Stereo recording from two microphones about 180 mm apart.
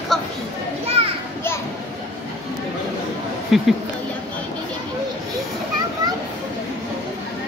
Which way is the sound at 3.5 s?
Centre (ahead or behind).